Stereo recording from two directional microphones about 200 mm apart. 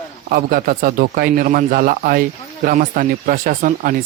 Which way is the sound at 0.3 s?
45° right (ahead or behind).